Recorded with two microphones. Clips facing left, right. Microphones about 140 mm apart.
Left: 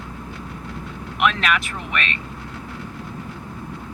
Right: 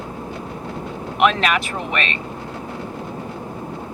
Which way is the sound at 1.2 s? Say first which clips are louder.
Right 3 dB; 35° right (ahead or behind).